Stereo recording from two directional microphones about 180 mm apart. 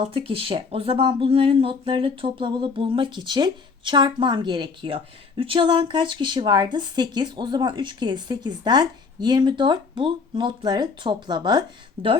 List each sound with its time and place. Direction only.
0.0 s speech: 30° right (ahead or behind)